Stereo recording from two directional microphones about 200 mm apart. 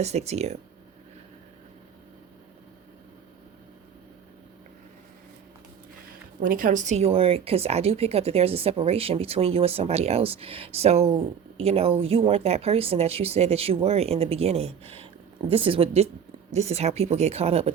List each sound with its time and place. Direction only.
0.0 s speech: 35° right (ahead or behind)
6.4 s speech: 45° right (ahead or behind)